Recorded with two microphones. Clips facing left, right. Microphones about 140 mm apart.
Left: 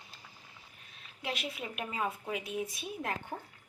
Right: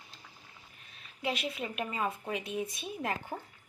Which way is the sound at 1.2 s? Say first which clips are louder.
Right 4 dB; centre (ahead or behind).